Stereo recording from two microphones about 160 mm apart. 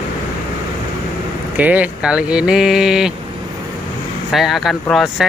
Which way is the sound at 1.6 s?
10° right (ahead or behind).